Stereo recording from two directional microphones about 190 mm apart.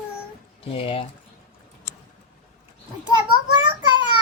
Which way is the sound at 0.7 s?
30° left (ahead or behind).